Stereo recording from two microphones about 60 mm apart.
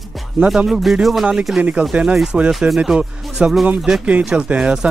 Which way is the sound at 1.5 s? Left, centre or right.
Centre.